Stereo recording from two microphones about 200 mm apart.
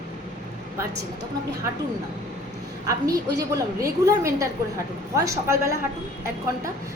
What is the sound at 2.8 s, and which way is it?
A woman's voice, 15° right (ahead or behind).